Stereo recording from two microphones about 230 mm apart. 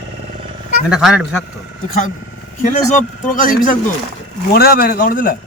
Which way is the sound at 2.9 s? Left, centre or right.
Left.